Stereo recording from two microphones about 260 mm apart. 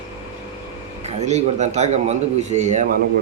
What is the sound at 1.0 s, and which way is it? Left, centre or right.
A man's voice, right.